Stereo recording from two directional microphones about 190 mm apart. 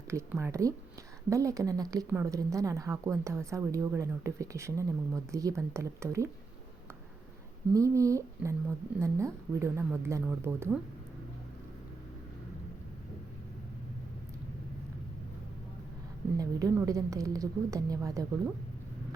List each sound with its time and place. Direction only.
0.1 s speech: 15° right (ahead or behind)
7.7 s speech: 15° right (ahead or behind)
16.4 s a woman's voice: 20° right (ahead or behind)